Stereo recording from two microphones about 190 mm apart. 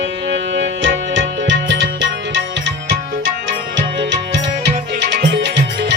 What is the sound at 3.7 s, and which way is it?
Tabla, 70° right (ahead or behind).